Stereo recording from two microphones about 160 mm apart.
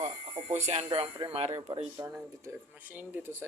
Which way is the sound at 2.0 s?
15° right (ahead or behind).